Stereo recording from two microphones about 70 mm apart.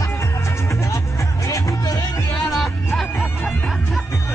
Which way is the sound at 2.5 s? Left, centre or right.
Centre.